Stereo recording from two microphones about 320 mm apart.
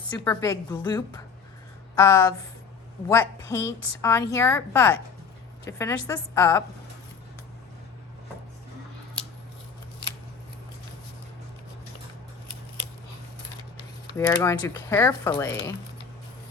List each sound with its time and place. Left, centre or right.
0.0 s speech: centre
14.2 s speech: centre